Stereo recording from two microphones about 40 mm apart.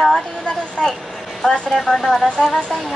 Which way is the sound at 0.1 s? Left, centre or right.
Left.